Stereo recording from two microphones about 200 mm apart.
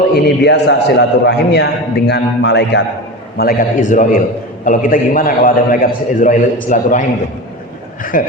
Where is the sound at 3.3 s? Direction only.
45° left (ahead or behind).